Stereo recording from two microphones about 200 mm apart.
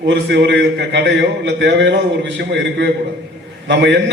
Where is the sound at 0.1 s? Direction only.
60° right (ahead or behind).